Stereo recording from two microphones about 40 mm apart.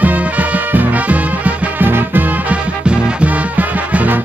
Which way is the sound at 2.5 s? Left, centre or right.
Right.